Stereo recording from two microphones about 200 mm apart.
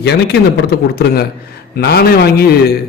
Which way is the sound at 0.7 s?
50° left (ahead or behind).